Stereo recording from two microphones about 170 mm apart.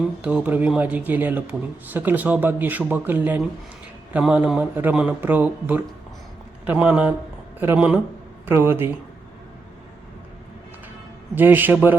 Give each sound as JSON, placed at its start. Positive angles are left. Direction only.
{"t": 0.2, "sound": "speech", "side_deg": -5}
{"t": 11.3, "sound": "speech", "side_deg": -10}